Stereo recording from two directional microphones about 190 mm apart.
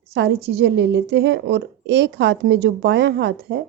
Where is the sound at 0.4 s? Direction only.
60° right (ahead or behind).